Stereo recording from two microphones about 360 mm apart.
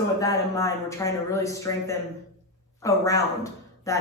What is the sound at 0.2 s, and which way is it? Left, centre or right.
Speech, centre.